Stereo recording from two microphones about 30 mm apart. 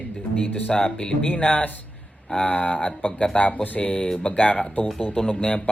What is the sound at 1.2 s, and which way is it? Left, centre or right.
Speech, left.